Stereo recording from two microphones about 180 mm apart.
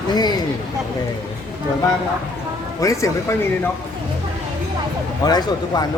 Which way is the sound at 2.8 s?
20° left (ahead or behind).